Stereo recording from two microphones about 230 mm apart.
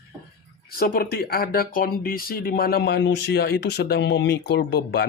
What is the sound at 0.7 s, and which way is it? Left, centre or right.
Speech, left.